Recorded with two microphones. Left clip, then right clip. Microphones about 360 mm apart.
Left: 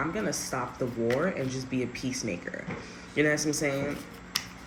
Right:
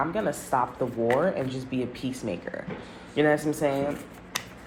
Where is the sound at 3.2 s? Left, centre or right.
Right.